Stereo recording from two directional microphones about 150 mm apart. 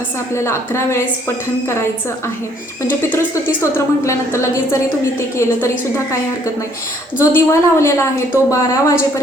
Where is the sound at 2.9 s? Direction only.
15° left (ahead or behind).